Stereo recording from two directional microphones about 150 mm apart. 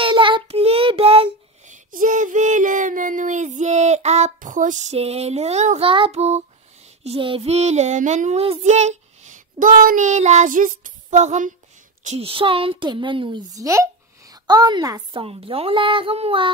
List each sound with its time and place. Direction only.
0.0 s child singing: 35° right (ahead or behind)
1.9 s child singing: 60° right (ahead or behind)
4.9 s speech: 45° right (ahead or behind)
5.9 s a woman's voice: 35° right (ahead or behind)
7.0 s child singing: 40° right (ahead or behind)
12.0 s a woman's voice: 45° right (ahead or behind); by 15.0 s 25° right (ahead or behind)
15.1 s a woman's voice: 40° right (ahead or behind)